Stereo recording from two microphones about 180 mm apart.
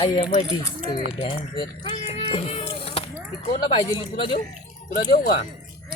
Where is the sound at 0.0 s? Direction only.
25° left (ahead or behind).